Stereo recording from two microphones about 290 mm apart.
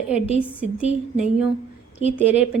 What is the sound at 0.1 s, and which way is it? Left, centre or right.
A woman's voice, centre.